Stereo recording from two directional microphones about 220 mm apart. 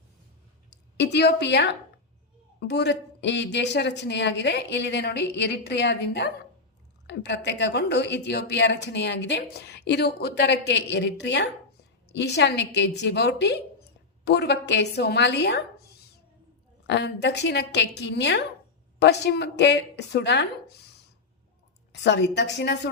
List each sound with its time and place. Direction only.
0.7 s a woman's voice: 50° left (ahead or behind)
21.9 s a woman's voice: 50° left (ahead or behind)